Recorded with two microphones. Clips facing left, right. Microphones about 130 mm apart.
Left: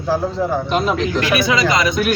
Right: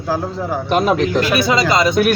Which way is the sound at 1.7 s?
30° right (ahead or behind).